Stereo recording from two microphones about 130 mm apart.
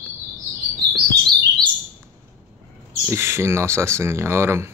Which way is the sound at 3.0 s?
20° right (ahead or behind).